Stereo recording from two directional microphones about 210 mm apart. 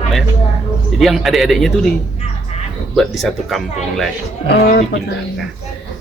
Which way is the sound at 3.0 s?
Centre (ahead or behind).